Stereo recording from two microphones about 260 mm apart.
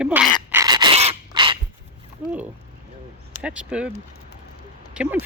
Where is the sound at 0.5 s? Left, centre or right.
Centre.